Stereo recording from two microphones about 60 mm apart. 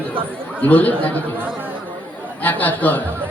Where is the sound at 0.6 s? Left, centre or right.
Left.